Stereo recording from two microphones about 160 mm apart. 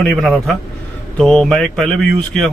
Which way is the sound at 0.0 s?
5° left (ahead or behind).